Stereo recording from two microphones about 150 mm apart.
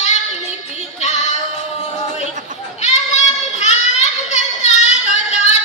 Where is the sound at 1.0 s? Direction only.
50° left (ahead or behind).